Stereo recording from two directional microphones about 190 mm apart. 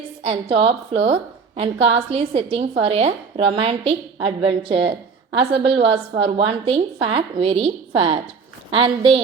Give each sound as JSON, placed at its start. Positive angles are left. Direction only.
{"t": 0.3, "sound": "a woman's voice", "side_deg": -30}